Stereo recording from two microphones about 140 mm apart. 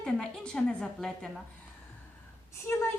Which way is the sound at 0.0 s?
5° left (ahead or behind).